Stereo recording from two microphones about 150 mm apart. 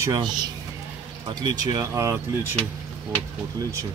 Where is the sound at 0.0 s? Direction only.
25° right (ahead or behind).